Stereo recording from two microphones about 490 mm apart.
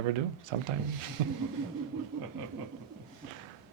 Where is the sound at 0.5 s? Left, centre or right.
Right.